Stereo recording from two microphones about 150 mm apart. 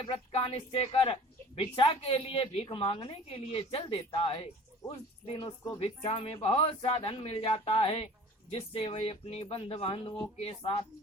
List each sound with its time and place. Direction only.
0.0 s a woman's voice: 40° left (ahead or behind)